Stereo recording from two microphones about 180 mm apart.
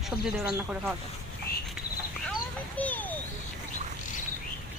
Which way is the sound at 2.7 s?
10° left (ahead or behind).